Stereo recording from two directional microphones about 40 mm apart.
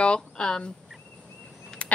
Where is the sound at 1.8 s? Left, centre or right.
Left.